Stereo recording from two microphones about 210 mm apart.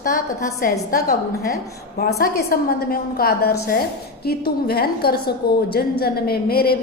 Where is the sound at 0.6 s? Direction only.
40° left (ahead or behind).